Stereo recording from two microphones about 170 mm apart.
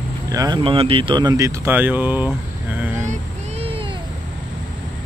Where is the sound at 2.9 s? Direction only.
45° right (ahead or behind).